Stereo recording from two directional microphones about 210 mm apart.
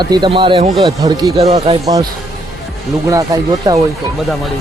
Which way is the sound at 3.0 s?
15° right (ahead or behind).